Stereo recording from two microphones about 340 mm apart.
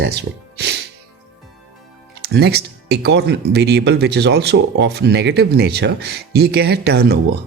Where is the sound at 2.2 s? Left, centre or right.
Right.